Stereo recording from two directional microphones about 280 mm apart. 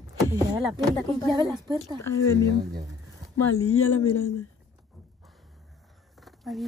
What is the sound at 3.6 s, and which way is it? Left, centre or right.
Speech, left.